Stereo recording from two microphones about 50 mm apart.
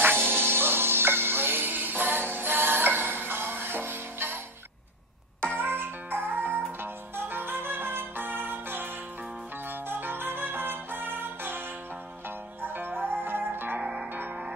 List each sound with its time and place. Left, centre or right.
0.0 s music: right
5.5 s music: right
9.8 s music: right
12.6 s music: right